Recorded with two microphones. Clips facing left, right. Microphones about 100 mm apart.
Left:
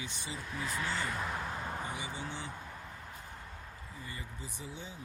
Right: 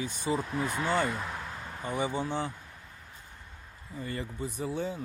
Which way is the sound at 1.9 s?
55° right (ahead or behind).